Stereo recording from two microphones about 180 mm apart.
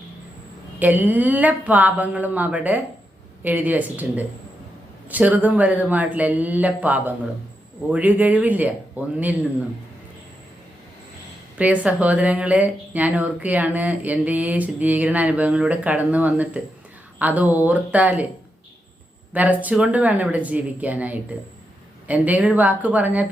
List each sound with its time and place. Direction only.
0.8 s speech: 10° right (ahead or behind)
11.5 s speech: 10° right (ahead or behind)
19.3 s speech: 10° right (ahead or behind)